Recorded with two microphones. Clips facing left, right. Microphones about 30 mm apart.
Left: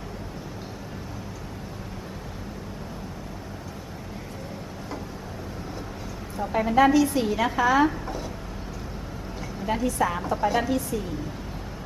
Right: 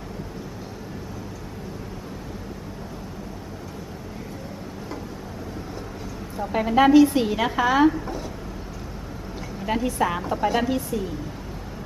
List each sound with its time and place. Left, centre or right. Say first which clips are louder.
6.5 s a woman's voice: right 3 dB; centre
7.9 s speech: right 6 dB; centre
9.6 s a woman's voice: right 1 dB; centre